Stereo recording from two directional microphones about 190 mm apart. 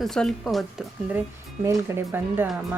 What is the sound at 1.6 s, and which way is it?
Speech, 15° right (ahead or behind).